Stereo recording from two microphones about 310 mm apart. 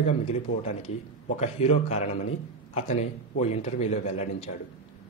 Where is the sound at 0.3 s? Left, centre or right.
Left.